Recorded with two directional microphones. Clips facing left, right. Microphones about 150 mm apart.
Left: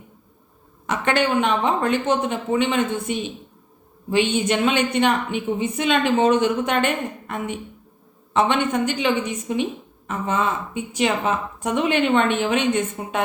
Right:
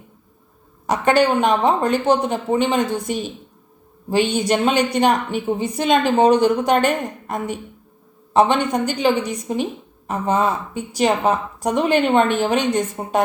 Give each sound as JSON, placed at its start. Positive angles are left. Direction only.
{"t": 0.9, "sound": "a woman's voice", "side_deg": -40}